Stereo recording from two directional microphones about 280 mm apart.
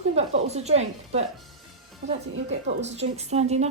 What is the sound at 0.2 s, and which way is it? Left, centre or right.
Speech, right.